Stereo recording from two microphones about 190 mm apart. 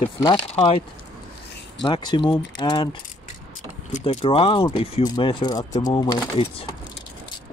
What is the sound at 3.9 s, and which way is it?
Speech, 35° left (ahead or behind).